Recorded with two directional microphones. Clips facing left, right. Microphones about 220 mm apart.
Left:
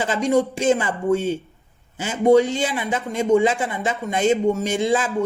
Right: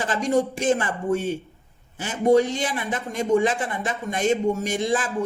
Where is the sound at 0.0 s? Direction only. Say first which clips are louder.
Left 3 dB; 25° left (ahead or behind).